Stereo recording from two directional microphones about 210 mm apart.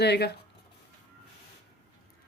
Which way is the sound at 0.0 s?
50° left (ahead or behind).